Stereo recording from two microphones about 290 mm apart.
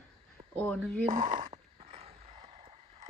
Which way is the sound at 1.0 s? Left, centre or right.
Right.